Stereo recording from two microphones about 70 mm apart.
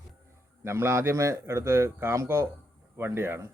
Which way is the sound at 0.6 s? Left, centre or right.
Right.